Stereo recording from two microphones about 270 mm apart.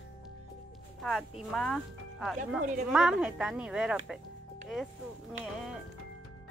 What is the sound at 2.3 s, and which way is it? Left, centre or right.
Speech, right.